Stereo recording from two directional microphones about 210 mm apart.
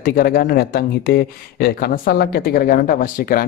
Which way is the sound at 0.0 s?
45° left (ahead or behind).